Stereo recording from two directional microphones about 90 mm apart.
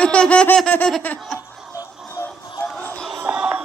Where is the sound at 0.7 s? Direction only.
25° left (ahead or behind).